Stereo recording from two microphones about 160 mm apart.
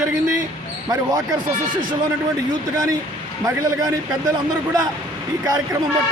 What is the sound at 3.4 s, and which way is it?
Speech, 25° right (ahead or behind).